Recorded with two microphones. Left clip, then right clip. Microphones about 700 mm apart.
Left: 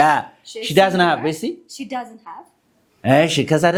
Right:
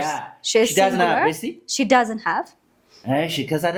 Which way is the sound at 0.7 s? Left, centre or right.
Left.